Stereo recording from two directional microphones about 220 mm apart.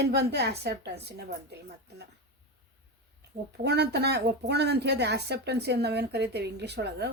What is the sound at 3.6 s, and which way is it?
A woman's voice, 50° right (ahead or behind).